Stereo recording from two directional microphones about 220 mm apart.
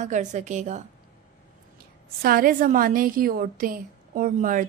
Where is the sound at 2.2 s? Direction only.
40° right (ahead or behind).